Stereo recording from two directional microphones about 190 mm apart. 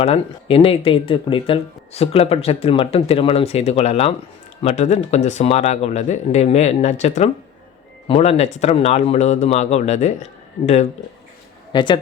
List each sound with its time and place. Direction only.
0.0 s speech: 30° left (ahead or behind)
11.7 s speech: 25° left (ahead or behind)